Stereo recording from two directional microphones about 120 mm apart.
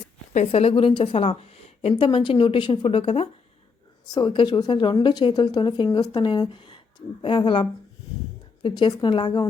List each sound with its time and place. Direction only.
0.3 s a woman's voice: 60° left (ahead or behind)
4.1 s a woman's voice: 40° left (ahead or behind)